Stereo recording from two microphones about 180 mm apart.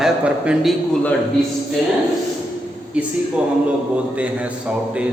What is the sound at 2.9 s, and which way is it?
A man's voice, 5° right (ahead or behind).